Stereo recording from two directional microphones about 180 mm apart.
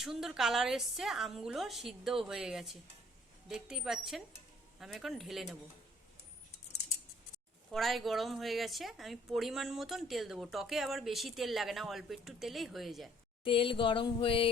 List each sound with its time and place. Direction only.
0.0 s a woman's voice: centre (ahead or behind)
7.7 s a woman's voice: centre (ahead or behind)
13.4 s a sound: 30° left (ahead or behind)